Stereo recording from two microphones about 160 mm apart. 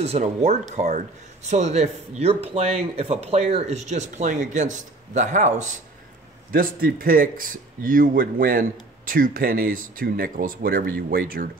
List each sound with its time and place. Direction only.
0.0 s speech: 40° right (ahead or behind)
6.5 s speech: 60° right (ahead or behind)